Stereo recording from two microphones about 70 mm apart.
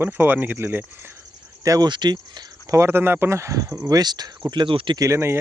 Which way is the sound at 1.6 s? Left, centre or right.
Right.